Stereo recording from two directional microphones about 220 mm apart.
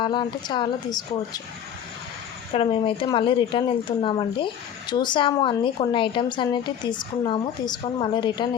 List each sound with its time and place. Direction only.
0.0 s speech: 20° left (ahead or behind)
2.5 s speech: 25° left (ahead or behind)